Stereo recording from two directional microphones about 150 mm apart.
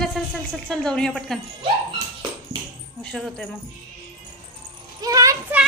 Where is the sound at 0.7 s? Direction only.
5° left (ahead or behind).